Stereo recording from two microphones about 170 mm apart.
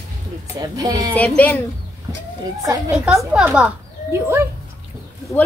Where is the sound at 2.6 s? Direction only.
20° right (ahead or behind).